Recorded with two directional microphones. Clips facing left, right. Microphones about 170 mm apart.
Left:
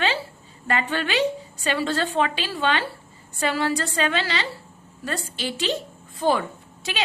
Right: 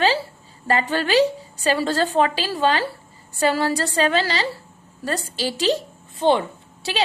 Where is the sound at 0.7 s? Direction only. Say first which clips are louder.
Right 5 dB; 35° right (ahead or behind).